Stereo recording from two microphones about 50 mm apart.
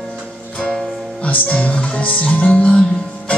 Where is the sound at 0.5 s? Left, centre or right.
Centre.